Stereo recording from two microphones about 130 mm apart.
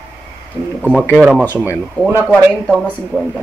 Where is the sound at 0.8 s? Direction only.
10° right (ahead or behind).